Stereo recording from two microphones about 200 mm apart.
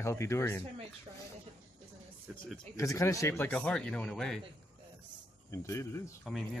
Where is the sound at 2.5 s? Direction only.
15° left (ahead or behind).